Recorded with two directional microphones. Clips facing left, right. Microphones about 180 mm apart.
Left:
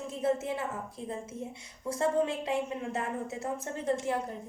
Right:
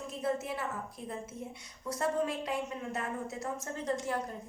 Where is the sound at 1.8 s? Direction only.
25° left (ahead or behind).